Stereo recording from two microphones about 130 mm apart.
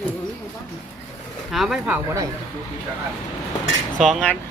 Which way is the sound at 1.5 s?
Centre (ahead or behind).